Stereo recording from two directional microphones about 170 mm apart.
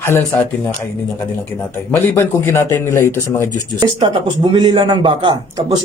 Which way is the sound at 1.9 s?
15° left (ahead or behind).